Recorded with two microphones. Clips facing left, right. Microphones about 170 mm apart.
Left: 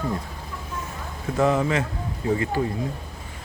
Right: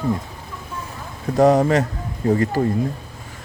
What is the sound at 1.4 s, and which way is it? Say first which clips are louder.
Speech: right 7 dB; 40° right (ahead or behind).